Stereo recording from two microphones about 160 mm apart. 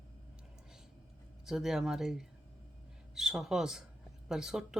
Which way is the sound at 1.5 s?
Centre (ahead or behind).